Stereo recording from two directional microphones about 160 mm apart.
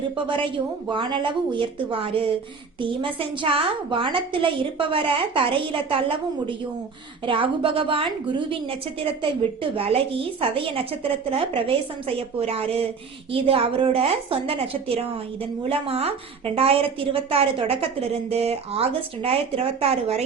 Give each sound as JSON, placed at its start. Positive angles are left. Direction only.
{"t": 0.3, "sound": "a woman's voice", "side_deg": -30}